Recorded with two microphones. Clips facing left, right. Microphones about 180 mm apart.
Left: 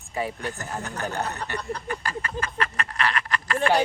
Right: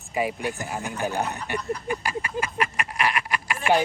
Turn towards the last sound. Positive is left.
turn(degrees=-10)  # may be behind; listen again after turning